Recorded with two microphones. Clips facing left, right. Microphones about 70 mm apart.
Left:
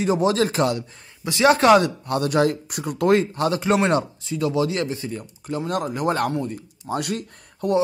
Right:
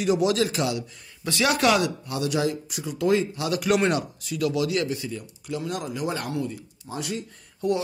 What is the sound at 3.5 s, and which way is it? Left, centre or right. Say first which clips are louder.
Speech: left 2 dB; left.